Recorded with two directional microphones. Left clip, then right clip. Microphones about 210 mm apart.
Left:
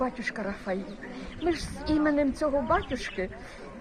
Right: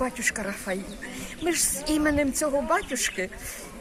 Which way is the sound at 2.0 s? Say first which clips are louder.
Right 2 dB; 15° right (ahead or behind).